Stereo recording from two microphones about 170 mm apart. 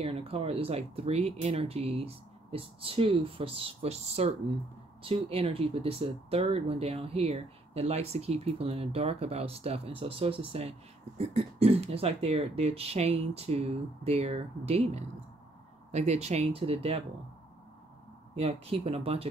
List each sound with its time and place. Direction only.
0.0 s speech: 35° right (ahead or behind)
18.3 s speech: 35° right (ahead or behind)